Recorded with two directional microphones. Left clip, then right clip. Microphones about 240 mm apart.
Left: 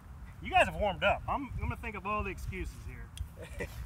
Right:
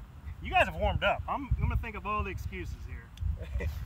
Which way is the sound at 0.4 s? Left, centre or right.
Centre.